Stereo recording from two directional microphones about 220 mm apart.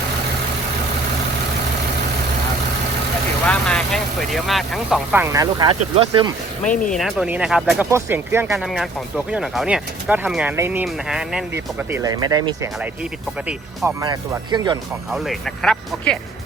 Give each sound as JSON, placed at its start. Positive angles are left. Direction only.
{"t": 3.4, "sound": "speech", "side_deg": 5}
{"t": 6.9, "sound": "speech", "side_deg": 0}
{"t": 15.1, "sound": "speech", "side_deg": 0}